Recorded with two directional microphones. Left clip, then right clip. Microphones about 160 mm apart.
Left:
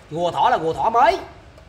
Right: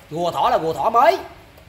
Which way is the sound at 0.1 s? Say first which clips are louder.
Even; 35° right (ahead or behind).